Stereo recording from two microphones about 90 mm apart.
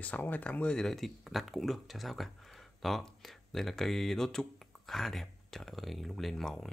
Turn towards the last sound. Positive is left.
turn(degrees=5)  # may be behind; listen again after turning